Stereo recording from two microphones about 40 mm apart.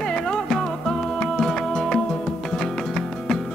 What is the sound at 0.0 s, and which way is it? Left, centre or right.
Music, centre.